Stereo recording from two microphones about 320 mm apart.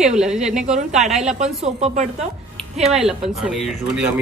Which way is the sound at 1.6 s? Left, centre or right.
Right.